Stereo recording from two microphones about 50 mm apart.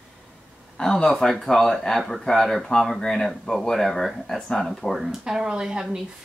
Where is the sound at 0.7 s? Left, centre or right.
Centre.